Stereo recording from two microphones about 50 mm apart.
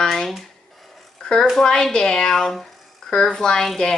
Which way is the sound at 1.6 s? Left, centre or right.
Centre.